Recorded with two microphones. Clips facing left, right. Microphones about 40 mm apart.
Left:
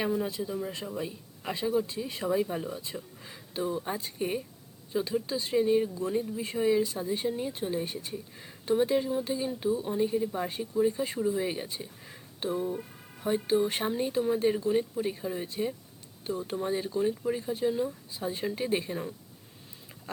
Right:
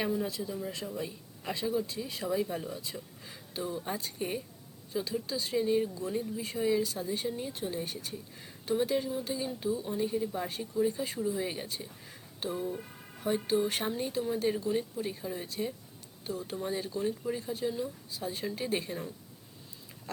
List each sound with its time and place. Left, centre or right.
0.0 s a woman's voice: centre
1.0 s a woman's voice: centre